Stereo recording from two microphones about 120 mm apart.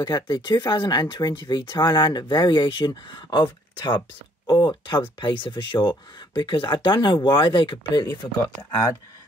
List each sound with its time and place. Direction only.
0.0 s speech: 40° left (ahead or behind)